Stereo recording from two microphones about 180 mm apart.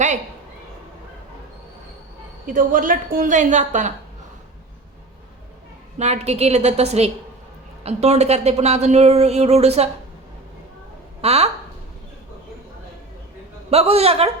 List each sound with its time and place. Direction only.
2.5 s a woman's voice: 50° right (ahead or behind)
6.0 s speech: 35° right (ahead or behind)
11.2 s speech: 35° right (ahead or behind)
13.7 s speech: 35° right (ahead or behind)